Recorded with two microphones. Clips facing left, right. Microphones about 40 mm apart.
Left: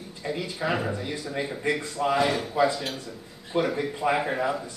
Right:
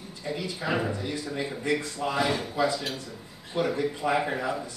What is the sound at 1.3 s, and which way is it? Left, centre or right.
Speech, left.